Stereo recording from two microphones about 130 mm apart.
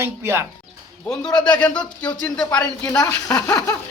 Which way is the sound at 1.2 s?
35° left (ahead or behind).